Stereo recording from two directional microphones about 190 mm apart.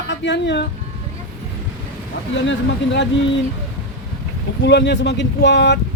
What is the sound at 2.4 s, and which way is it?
Speech, 70° left (ahead or behind).